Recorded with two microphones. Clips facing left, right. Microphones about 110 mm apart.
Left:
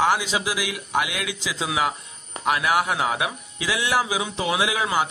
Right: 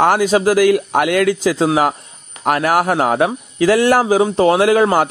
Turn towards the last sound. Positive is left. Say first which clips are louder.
# right 11 dB
turn(degrees=-50)  # may be behind; listen again after turning